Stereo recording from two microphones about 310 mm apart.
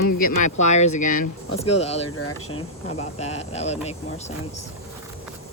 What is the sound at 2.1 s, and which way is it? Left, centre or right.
Speech, left.